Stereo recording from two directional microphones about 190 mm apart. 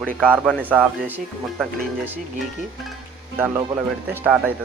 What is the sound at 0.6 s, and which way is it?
Speech, 10° right (ahead or behind).